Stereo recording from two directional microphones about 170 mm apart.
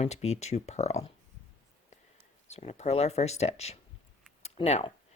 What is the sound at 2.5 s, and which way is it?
Speech, 40° left (ahead or behind).